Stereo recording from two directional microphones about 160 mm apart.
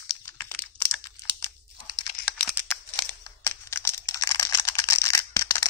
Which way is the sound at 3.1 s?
15° left (ahead or behind).